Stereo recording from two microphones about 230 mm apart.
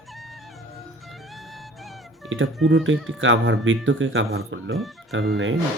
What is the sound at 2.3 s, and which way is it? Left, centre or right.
Speech, right.